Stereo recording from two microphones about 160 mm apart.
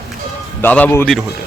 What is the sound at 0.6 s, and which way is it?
Speech, 10° left (ahead or behind).